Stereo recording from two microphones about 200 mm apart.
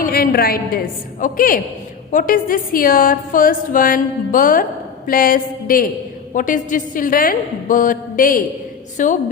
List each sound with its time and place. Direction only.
0.0 s a woman's voice: 50° left (ahead or behind)